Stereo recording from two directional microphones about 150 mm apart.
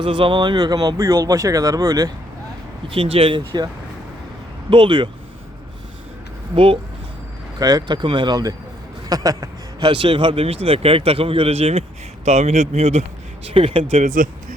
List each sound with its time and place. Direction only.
0.0 s speech: 35° right (ahead or behind)
2.8 s a man's voice: 35° right (ahead or behind)
4.7 s a man's voice: 35° right (ahead or behind)
7.6 s a man's voice: 25° right (ahead or behind)
14.0 s speech: 55° right (ahead or behind)